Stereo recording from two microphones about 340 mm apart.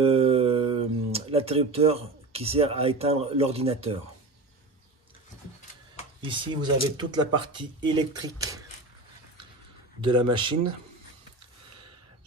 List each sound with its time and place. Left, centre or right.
0.0 s a sound: centre
6.2 s speech: centre
10.0 s speech: centre